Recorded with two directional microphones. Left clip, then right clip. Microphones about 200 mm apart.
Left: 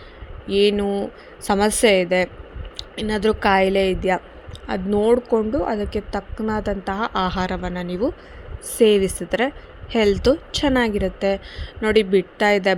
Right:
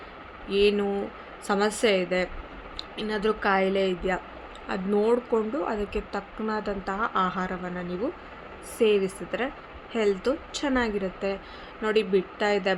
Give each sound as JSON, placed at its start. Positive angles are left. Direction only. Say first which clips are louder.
{"t": 0.4, "sound": "a woman's voice", "louder": "left 5 dB", "side_deg": 35}